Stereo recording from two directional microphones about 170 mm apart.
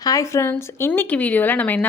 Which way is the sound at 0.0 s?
20° left (ahead or behind).